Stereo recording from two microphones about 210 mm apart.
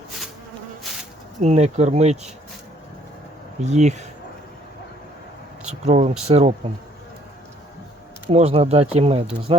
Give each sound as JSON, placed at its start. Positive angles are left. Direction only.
{"t": 1.4, "sound": "speech", "side_deg": -30}
{"t": 3.6, "sound": "speech", "side_deg": -35}
{"t": 5.6, "sound": "speech", "side_deg": -35}
{"t": 8.3, "sound": "speech", "side_deg": -30}